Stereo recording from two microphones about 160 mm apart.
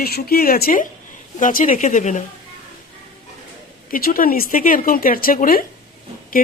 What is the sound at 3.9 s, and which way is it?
A woman's voice, 65° left (ahead or behind).